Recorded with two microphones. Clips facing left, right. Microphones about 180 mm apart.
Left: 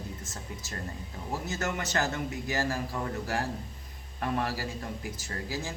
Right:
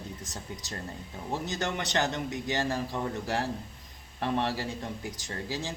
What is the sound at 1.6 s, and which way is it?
Speech, 30° right (ahead or behind).